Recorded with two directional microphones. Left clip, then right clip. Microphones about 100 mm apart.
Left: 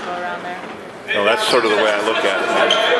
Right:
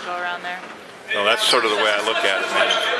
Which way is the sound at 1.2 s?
15° right (ahead or behind).